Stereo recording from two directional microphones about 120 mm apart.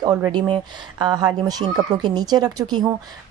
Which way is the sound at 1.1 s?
35° right (ahead or behind).